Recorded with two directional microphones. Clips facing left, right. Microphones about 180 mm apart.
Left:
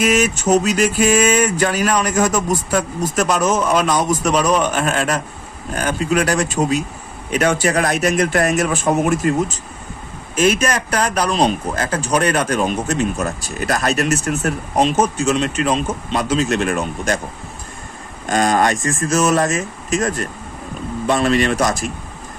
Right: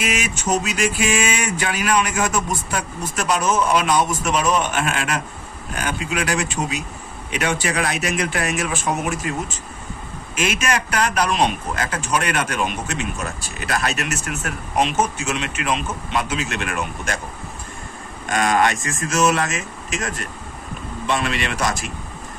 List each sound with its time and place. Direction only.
0.0 s speech: 40° left (ahead or behind)
10.3 s speech: 40° left (ahead or behind)
18.3 s speech: 35° left (ahead or behind)